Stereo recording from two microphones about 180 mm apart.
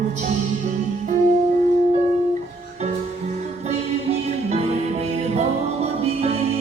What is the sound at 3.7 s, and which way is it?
Music, 35° right (ahead or behind).